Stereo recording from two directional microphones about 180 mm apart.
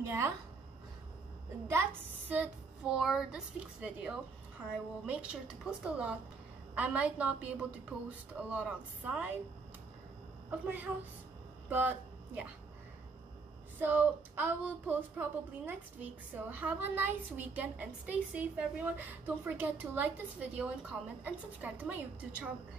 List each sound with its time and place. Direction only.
0.0 s a woman's voice: 15° right (ahead or behind)
1.7 s speech: 10° right (ahead or behind)
10.5 s a woman's voice: 10° right (ahead or behind)
13.7 s speech: 10° right (ahead or behind)